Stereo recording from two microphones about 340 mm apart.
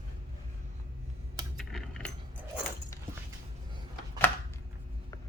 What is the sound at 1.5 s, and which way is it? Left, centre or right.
Coin, centre.